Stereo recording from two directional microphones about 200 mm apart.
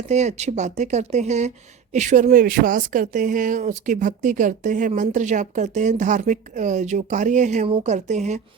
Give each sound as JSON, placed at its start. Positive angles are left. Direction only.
{"t": 0.1, "sound": "speech", "side_deg": -35}